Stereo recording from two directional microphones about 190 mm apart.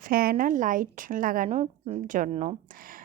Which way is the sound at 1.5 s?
35° right (ahead or behind).